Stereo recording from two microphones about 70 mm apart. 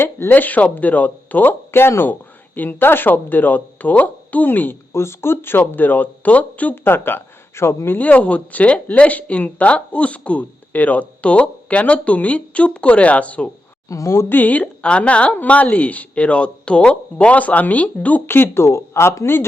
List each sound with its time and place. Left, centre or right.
0.0 s speech: left
4.9 s speech: left
7.9 s speech: left
13.8 s speech: left
14.3 s speech: left